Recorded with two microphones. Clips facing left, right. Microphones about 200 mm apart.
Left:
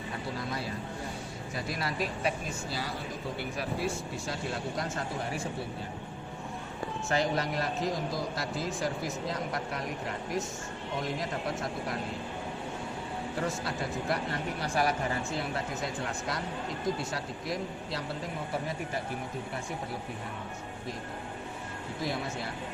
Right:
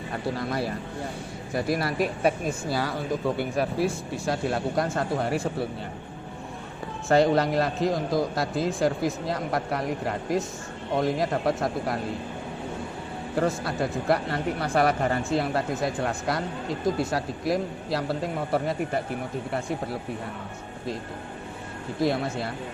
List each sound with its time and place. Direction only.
0.3 s a man's voice: 65° right (ahead or behind)
7.1 s a man's voice: 65° right (ahead or behind)
13.4 s speech: 60° right (ahead or behind)
22.0 s speech: 65° right (ahead or behind)